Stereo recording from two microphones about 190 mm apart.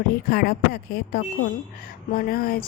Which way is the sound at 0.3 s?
55° left (ahead or behind).